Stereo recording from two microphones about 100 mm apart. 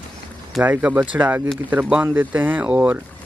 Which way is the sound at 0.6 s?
15° right (ahead or behind).